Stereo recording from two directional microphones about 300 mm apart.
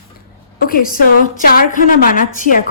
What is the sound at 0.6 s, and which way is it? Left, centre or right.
A woman's voice, left.